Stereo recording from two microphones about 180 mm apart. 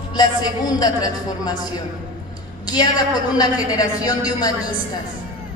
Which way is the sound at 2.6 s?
20° left (ahead or behind).